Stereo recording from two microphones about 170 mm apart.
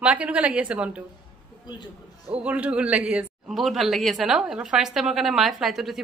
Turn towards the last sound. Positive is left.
turn(degrees=0)  # may be behind; listen again after turning